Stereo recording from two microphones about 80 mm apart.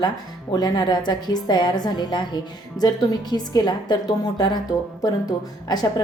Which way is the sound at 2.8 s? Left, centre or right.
Left.